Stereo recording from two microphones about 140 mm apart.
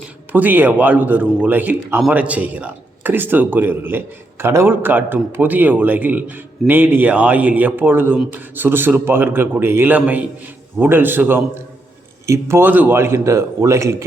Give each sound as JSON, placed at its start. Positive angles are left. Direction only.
{"t": 0.3, "sound": "a man's voice", "side_deg": -10}